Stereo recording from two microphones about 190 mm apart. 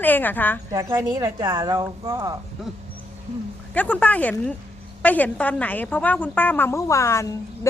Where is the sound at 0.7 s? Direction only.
15° right (ahead or behind).